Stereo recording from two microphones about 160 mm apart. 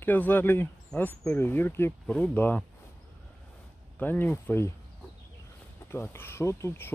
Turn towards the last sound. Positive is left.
turn(degrees=15)  # may be behind; listen again after turning